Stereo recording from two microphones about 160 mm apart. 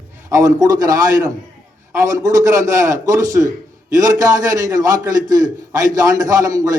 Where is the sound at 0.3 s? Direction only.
20° right (ahead or behind).